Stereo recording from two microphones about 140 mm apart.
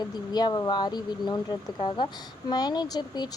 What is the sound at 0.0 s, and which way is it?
Speech, 30° left (ahead or behind).